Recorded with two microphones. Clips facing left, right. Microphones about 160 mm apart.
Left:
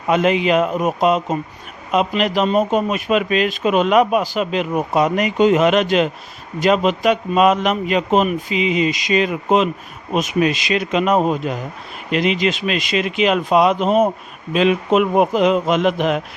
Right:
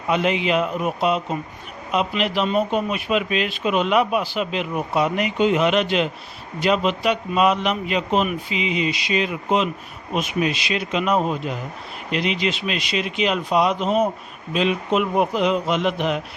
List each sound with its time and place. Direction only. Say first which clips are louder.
0.1 s speech: left 5 dB; 45° left (ahead or behind)
13.2 s speech: left 5 dB; 65° left (ahead or behind); by 16.2 s 50° left (ahead or behind)